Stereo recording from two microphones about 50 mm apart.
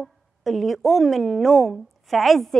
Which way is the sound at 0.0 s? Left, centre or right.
Centre.